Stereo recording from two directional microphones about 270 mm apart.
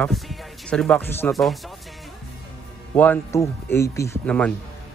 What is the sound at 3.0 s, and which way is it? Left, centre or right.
Speech, centre.